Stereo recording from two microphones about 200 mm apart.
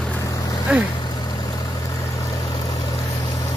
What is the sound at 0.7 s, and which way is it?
Speech, 5° right (ahead or behind).